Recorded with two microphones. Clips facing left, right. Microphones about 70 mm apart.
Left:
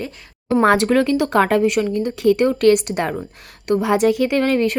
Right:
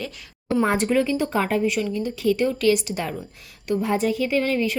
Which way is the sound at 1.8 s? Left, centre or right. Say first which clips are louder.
Left 6 dB; left.